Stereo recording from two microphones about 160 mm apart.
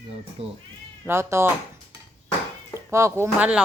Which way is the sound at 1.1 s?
15° right (ahead or behind).